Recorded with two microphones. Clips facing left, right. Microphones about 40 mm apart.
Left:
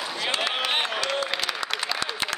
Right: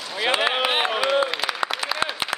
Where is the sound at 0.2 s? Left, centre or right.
Centre.